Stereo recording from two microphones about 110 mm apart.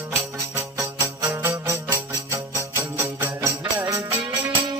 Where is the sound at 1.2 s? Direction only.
25° right (ahead or behind).